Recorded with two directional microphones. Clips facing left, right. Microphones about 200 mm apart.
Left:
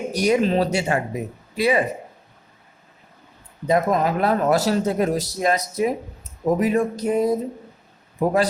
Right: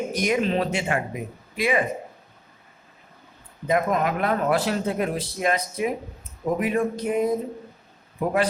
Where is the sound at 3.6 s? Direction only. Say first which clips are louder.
Left 3 dB; 35° left (ahead or behind).